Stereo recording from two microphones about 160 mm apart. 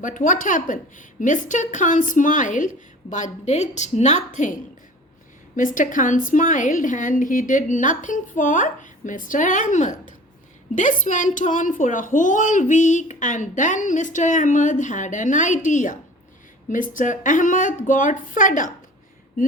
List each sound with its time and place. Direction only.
0.0 s a woman's voice: 55° left (ahead or behind)
5.5 s a woman's voice: 55° left (ahead or behind)